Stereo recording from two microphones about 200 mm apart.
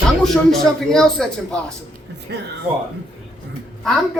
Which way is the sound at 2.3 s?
55° right (ahead or behind).